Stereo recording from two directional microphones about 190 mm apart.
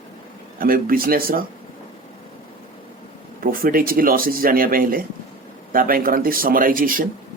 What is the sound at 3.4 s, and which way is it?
Speech, 50° right (ahead or behind).